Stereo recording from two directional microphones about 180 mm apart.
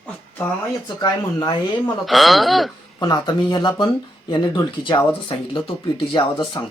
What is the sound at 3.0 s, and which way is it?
Speech, 25° left (ahead or behind).